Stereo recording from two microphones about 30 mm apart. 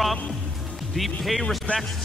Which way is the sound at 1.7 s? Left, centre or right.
Left.